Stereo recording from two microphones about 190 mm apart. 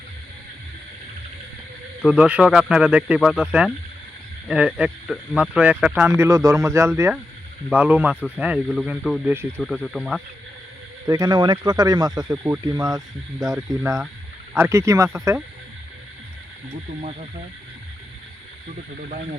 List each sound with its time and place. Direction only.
2.0 s speech: 5° right (ahead or behind)
8.6 s speech: 5° left (ahead or behind)
11.0 s speech: 20° right (ahead or behind)
17.0 s speech: 35° right (ahead or behind)